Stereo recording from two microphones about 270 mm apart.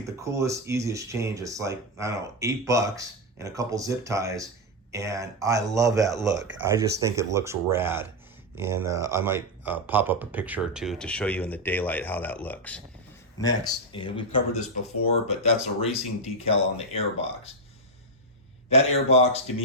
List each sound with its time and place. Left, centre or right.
0.2 s speech: centre
15.8 s speech: left
18.7 s speech: left